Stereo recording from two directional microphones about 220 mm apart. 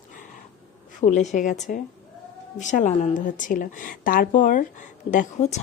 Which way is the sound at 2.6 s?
35° left (ahead or behind).